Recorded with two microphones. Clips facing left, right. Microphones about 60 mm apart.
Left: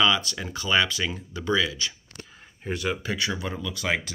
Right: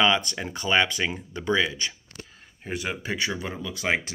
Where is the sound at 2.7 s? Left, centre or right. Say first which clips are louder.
Left 2 dB; centre.